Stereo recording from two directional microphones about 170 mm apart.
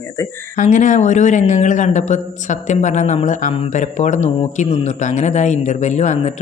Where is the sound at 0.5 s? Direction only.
45° left (ahead or behind).